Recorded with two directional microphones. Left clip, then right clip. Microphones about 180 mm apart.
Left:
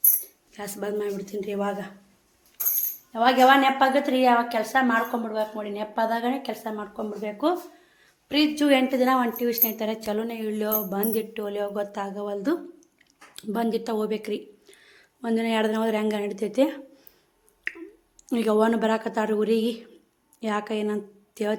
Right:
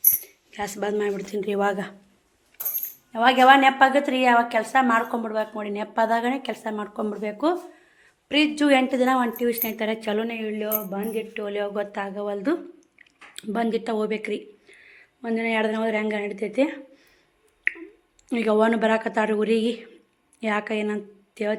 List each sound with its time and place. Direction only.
0.5 s a woman's voice: centre (ahead or behind)
1.5 s speech: 25° right (ahead or behind)
3.1 s a woman's voice: 5° right (ahead or behind)
10.4 s speech: 20° left (ahead or behind)
11.5 s a woman's voice: centre (ahead or behind)
14.7 s a woman's voice: 15° left (ahead or behind)
17.7 s finger snapping: 5° left (ahead or behind)
18.3 s a woman's voice: 5° left (ahead or behind)